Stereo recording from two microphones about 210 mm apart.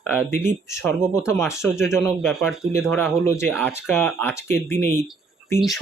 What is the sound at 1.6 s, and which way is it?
Speech, centre (ahead or behind).